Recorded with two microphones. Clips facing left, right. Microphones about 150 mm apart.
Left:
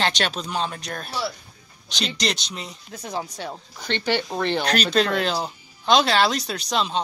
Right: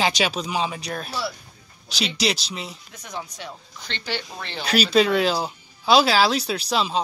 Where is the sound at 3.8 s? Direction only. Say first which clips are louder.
Left 7 dB; 60° left (ahead or behind).